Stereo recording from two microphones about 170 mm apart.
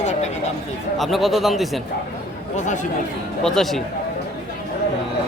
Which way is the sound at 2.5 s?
45° left (ahead or behind).